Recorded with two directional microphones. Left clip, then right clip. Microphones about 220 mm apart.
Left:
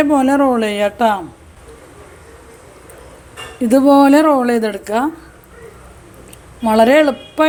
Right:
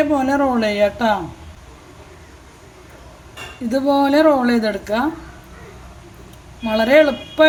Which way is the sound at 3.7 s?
45° left (ahead or behind).